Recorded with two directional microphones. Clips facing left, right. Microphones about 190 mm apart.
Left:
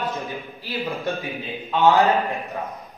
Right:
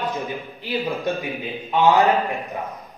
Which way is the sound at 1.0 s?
15° right (ahead or behind).